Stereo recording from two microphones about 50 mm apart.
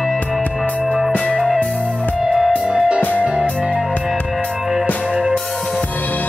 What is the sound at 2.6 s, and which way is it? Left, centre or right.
Music, centre.